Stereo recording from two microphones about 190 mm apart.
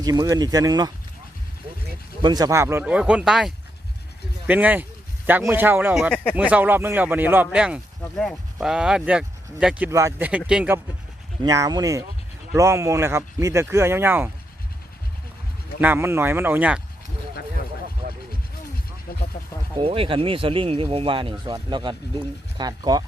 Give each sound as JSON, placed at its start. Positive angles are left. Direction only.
{"t": 0.0, "sound": "speech", "side_deg": -20}
{"t": 2.2, "sound": "a man's voice", "side_deg": -20}
{"t": 11.4, "sound": "speech", "side_deg": -20}
{"t": 15.8, "sound": "speech", "side_deg": -10}
{"t": 18.0, "sound": "vehicle", "side_deg": -50}
{"t": 19.8, "sound": "speech", "side_deg": -30}